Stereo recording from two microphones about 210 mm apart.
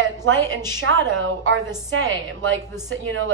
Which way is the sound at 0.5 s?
65° right (ahead or behind).